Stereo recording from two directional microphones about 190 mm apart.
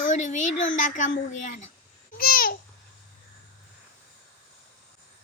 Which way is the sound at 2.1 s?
50° left (ahead or behind).